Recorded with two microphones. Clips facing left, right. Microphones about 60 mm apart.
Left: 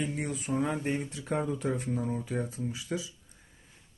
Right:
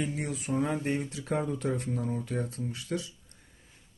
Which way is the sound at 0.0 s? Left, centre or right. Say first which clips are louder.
Even; centre.